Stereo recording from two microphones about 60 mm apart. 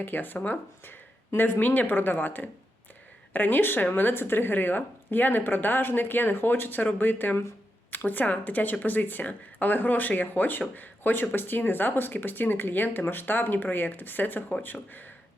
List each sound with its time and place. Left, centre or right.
0.0 s speech: left